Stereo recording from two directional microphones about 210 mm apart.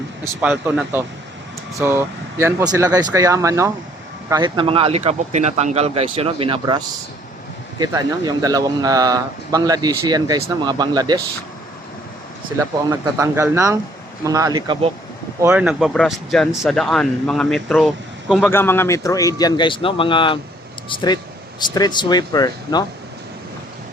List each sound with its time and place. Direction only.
0.4 s speech: 5° right (ahead or behind)
12.5 s speech: 15° right (ahead or behind)
15.4 s speech: 5° right (ahead or behind); by 22.9 s 20° left (ahead or behind)